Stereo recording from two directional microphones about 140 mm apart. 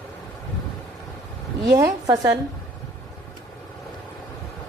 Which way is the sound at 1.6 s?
25° right (ahead or behind).